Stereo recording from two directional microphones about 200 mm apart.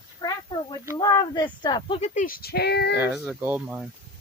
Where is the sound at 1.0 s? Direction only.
20° left (ahead or behind).